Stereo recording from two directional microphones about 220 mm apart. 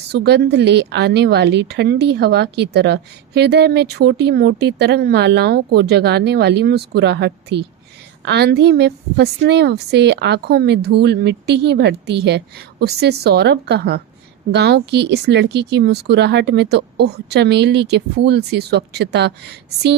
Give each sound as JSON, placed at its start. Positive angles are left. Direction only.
{"t": 0.1, "sound": "a woman's voice", "side_deg": -50}